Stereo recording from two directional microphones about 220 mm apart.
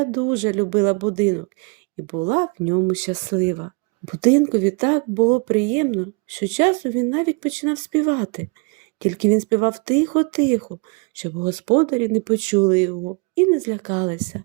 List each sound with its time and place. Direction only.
0.0 s speech: 30° right (ahead or behind)